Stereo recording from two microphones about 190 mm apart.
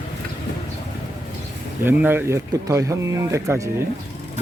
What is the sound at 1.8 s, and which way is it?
Speech, 10° right (ahead or behind).